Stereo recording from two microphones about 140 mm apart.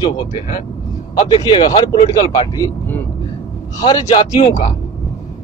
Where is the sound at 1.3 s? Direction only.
40° left (ahead or behind).